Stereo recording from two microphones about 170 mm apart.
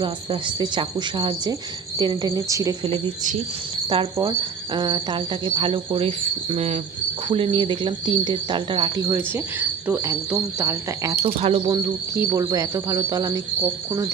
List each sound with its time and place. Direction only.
0.0 s speech: 25° right (ahead or behind)
3.8 s cricket: 25° right (ahead or behind)
7.3 s speech: 30° right (ahead or behind)
11.3 s speech: 35° right (ahead or behind)